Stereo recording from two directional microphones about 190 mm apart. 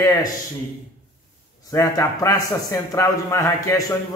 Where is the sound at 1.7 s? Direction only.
15° left (ahead or behind).